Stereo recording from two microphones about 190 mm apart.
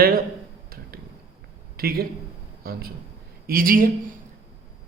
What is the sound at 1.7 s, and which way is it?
A man's voice, 55° right (ahead or behind).